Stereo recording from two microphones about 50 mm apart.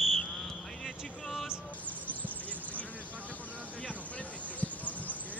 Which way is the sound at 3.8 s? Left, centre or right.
Left.